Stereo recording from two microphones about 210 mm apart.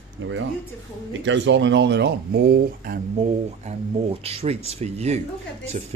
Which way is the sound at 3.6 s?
30° right (ahead or behind).